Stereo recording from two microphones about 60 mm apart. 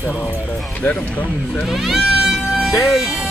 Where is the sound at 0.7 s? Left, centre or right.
Left.